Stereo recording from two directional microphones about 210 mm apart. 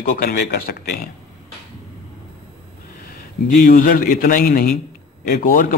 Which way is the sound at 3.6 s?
40° left (ahead or behind).